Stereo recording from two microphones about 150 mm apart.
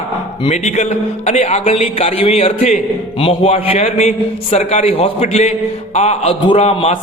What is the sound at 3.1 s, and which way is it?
A man's voice, 40° left (ahead or behind).